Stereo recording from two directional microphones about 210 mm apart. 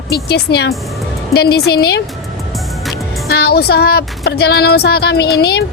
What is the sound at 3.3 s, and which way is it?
A woman's voice, 50° left (ahead or behind).